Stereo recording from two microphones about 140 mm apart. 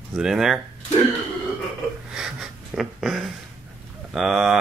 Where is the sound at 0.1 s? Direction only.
5° right (ahead or behind).